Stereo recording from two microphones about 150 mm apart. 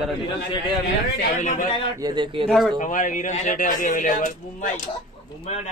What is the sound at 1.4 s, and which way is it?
Speech, 60° left (ahead or behind).